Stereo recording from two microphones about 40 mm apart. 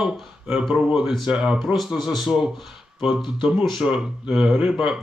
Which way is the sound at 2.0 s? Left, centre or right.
Centre.